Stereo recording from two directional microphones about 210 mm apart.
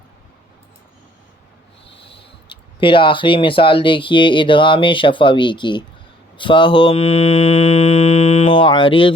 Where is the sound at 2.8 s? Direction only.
25° left (ahead or behind).